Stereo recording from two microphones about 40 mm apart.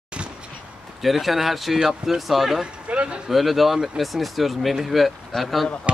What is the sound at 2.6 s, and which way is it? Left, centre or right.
Speech, right.